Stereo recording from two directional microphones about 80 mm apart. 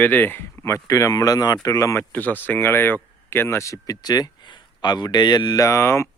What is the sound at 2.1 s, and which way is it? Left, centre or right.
Speech, left.